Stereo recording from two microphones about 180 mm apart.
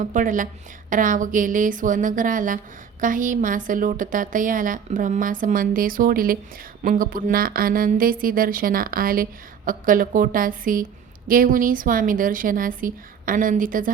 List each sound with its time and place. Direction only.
0.0 s speech: 45° right (ahead or behind)